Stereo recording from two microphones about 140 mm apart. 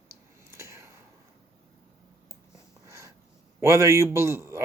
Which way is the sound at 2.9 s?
20° right (ahead or behind).